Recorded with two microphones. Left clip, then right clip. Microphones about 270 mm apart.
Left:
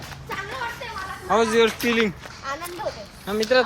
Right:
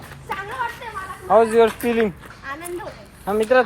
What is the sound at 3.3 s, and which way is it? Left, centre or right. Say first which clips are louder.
Speech: right 3 dB; centre.